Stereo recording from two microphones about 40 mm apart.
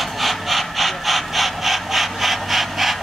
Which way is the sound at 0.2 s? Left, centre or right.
Centre.